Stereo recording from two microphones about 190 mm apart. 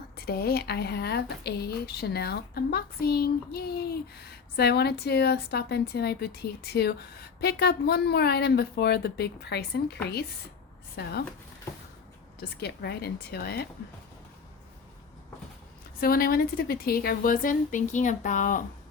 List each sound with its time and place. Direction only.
0.2 s speech: 55° left (ahead or behind)
12.4 s speech: 60° left (ahead or behind)
16.0 s a woman's voice: 50° left (ahead or behind)